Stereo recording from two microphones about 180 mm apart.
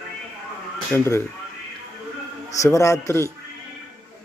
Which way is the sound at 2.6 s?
15° left (ahead or behind).